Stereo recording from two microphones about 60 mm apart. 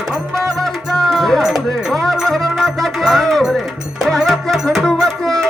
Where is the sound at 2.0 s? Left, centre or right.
Centre.